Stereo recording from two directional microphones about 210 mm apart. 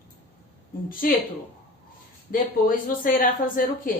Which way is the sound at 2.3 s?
45° left (ahead or behind).